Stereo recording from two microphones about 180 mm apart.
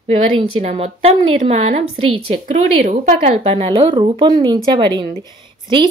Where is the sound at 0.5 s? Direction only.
35° right (ahead or behind).